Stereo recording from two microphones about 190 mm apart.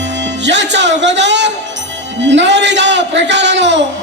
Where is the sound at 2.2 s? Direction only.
70° right (ahead or behind).